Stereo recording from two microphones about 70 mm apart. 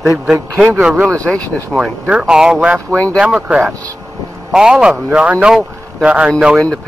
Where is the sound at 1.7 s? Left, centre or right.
Centre.